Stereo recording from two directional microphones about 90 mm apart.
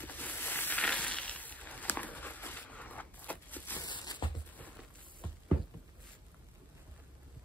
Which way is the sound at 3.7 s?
55° left (ahead or behind).